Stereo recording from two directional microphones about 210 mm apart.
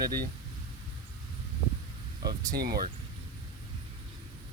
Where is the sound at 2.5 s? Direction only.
45° right (ahead or behind).